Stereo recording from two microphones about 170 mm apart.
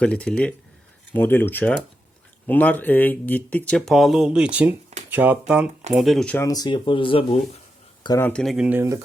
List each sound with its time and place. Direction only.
0.0 s speech: 5° left (ahead or behind)
6.4 s speech: 20° left (ahead or behind)
8.2 s speech: 5° left (ahead or behind); by 9.0 s 15° right (ahead or behind)